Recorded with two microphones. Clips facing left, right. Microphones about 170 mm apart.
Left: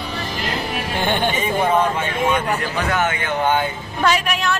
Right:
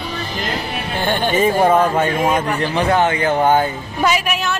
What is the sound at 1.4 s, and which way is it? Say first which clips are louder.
Speech: right 7 dB; 45° right (ahead or behind).